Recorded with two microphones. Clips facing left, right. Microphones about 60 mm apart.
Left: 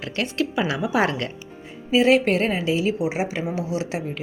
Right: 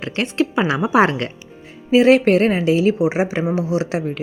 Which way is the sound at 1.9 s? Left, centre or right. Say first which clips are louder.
Right 5 dB; right.